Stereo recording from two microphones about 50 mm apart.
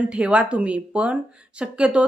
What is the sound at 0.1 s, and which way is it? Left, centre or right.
Speech, right.